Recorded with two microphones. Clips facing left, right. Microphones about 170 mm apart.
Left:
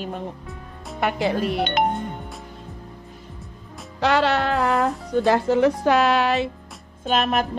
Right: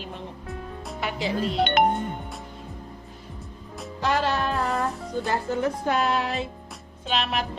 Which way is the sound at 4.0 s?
75° left (ahead or behind).